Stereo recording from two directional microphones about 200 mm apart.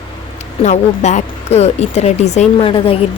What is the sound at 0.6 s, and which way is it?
Speech, 35° left (ahead or behind).